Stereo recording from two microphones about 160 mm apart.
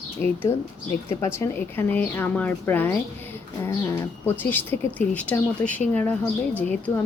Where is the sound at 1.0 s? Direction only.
15° left (ahead or behind).